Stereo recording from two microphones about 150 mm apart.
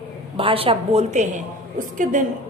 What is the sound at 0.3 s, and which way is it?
Speech, 40° right (ahead or behind).